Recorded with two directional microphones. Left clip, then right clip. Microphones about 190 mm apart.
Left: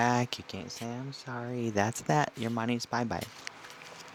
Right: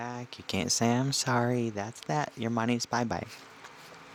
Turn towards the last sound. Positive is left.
turn(degrees=-35)  # may be behind; listen again after turning